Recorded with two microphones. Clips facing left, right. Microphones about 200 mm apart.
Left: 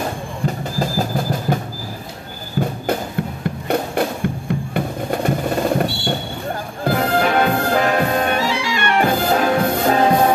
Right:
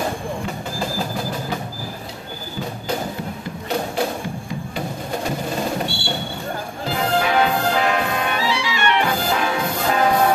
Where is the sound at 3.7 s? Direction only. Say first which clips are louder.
Left 4 dB; 55° left (ahead or behind).